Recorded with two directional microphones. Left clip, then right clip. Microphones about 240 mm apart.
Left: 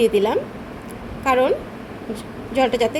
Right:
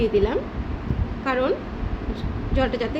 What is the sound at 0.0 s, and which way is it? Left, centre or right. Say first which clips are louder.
A woman's voice: left 4 dB; centre.